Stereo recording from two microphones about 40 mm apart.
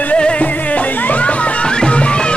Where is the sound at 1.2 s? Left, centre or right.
Left.